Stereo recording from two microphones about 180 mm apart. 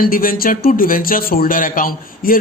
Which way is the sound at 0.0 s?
55° left (ahead or behind).